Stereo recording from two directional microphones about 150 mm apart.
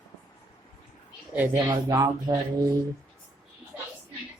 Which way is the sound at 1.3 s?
15° right (ahead or behind).